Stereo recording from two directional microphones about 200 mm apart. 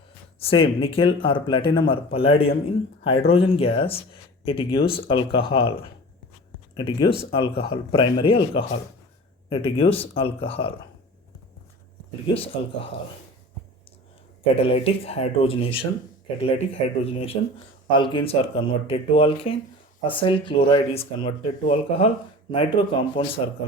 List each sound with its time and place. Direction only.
0.3 s speech: 30° left (ahead or behind)
12.3 s speech: 30° left (ahead or behind)
14.5 s speech: 30° left (ahead or behind)
17.0 s speech: 30° left (ahead or behind)